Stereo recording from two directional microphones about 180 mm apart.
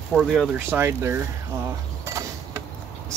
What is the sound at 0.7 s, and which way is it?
Speech, 15° right (ahead or behind).